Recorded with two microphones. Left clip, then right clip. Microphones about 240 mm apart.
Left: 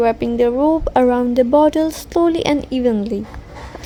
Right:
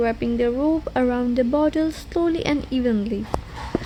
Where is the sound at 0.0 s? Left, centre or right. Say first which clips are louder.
Left 6 dB; left.